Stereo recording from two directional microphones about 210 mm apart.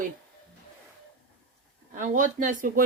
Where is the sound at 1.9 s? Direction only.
35° right (ahead or behind).